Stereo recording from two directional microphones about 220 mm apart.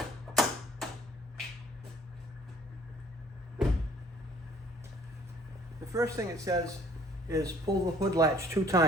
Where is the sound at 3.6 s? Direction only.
Centre (ahead or behind).